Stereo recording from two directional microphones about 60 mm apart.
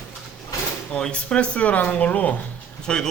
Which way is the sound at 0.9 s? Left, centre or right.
Centre.